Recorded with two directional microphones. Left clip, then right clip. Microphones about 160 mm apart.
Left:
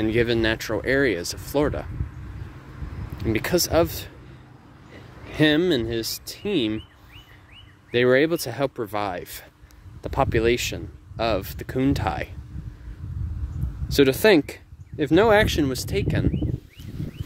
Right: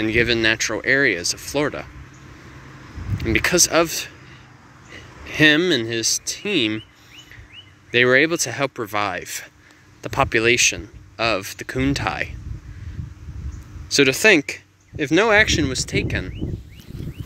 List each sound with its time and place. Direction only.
0.0 s speech: 15° left (ahead or behind)
3.2 s speech: 10° left (ahead or behind)
7.9 s speech: 15° left (ahead or behind)
13.8 s speech: 20° left (ahead or behind)